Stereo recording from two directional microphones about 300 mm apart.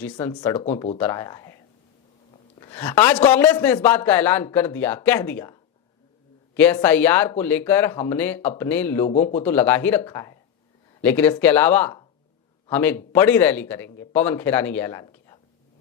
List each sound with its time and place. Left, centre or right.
0.0 s a man's voice: centre
0.9 s a man's voice: centre
2.6 s a man's voice: centre
9.0 s speech: left
9.4 s a man's voice: centre